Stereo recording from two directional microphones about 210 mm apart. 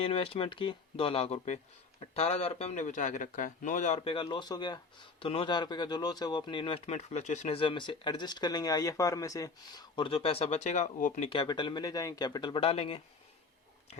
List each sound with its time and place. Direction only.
0.0 s speech: 30° left (ahead or behind)
11.3 s speech: 25° left (ahead or behind)